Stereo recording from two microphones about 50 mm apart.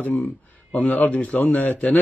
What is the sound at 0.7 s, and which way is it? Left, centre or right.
A man's voice, left.